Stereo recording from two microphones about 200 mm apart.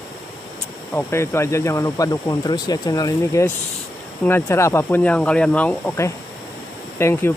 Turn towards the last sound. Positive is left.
turn(degrees=10)  # may be behind; listen again after turning